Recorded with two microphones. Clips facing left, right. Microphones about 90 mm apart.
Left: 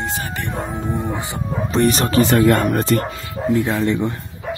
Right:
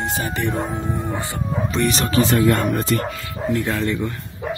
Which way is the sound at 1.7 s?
40° left (ahead or behind).